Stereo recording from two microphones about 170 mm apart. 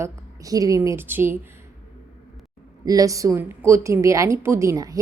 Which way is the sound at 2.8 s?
20° right (ahead or behind).